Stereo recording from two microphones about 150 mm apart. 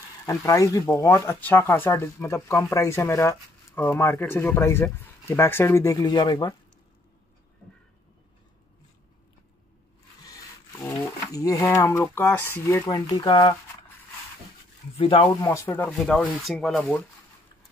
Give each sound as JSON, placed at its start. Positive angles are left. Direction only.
{"t": 0.3, "sound": "speech", "side_deg": 20}
{"t": 10.7, "sound": "speech", "side_deg": 20}
{"t": 15.0, "sound": "speech", "side_deg": 35}
{"t": 15.4, "sound": "speech", "side_deg": 20}
{"t": 15.9, "sound": "speech", "side_deg": 5}